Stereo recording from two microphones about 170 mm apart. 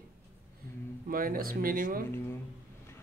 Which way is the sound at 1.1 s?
55° right (ahead or behind).